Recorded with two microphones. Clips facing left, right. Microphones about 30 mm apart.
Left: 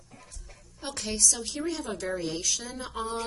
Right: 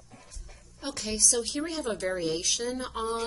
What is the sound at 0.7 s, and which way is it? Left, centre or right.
Speech, centre.